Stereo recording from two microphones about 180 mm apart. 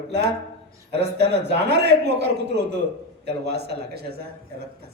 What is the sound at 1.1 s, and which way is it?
A man's voice, 70° right (ahead or behind).